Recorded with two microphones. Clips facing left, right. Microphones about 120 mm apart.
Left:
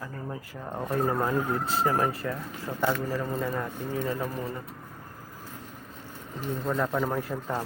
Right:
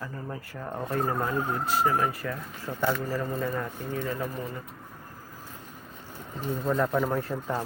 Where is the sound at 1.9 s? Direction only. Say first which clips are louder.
Left 1 dB; 35° left (ahead or behind).